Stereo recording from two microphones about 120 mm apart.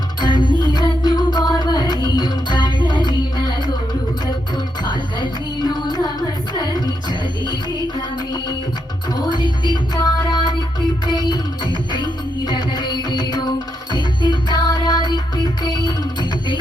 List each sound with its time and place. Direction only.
0.2 s music: 35° left (ahead or behind)
9.1 s music: 35° left (ahead or behind)